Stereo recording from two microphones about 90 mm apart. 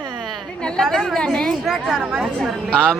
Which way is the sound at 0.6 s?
5° left (ahead or behind).